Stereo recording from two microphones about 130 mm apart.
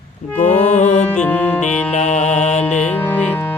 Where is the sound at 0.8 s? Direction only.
60° left (ahead or behind).